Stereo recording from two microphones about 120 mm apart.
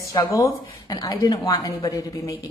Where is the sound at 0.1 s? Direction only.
30° left (ahead or behind).